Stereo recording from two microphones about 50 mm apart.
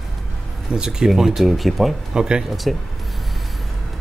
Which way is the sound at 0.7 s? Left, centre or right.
Centre.